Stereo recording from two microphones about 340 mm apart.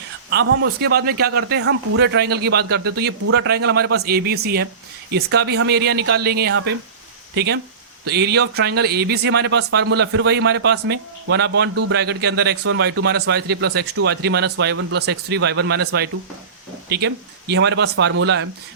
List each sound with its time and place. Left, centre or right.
0.3 s a man's voice: right